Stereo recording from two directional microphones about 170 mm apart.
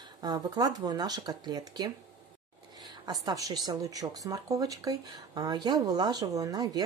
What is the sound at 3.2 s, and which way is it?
Speech, 20° right (ahead or behind).